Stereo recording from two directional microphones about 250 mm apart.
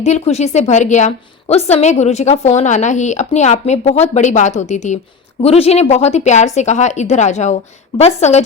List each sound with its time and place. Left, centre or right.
0.0 s a woman's voice: left